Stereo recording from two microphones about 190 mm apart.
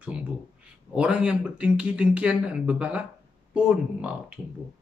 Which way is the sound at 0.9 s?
5° right (ahead or behind).